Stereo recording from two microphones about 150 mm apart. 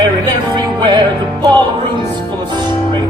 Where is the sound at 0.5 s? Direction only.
30° right (ahead or behind).